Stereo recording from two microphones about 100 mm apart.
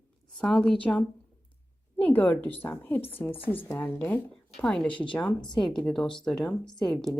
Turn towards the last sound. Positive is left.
turn(degrees=0)  # may be behind; listen again after turning